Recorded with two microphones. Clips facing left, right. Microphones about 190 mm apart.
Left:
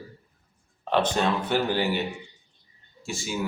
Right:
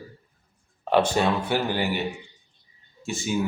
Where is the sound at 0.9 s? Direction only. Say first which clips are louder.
Right 3 dB; 10° right (ahead or behind).